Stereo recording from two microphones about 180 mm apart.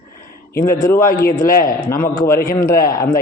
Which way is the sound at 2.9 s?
20° left (ahead or behind).